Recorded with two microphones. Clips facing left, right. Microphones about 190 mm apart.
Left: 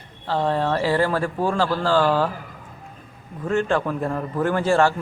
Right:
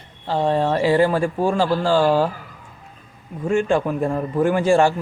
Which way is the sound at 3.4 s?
15° right (ahead or behind).